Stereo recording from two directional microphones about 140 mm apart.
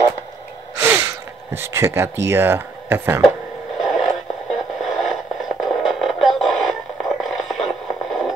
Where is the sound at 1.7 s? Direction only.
20° right (ahead or behind).